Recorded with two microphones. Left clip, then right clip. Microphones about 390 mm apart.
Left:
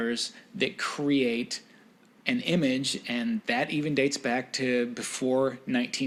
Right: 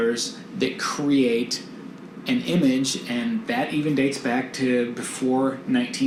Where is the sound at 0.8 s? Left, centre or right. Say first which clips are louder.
Right 6 dB; left.